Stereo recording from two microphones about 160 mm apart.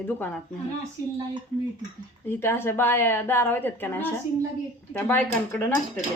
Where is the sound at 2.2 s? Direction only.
15° left (ahead or behind).